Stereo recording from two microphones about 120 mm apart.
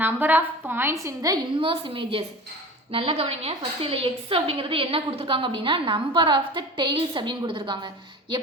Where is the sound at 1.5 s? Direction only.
50° right (ahead or behind).